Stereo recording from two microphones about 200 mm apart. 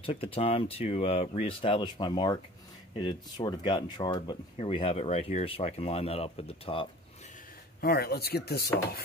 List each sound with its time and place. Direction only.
0.0 s speech: 25° left (ahead or behind)
7.8 s speech: 50° left (ahead or behind)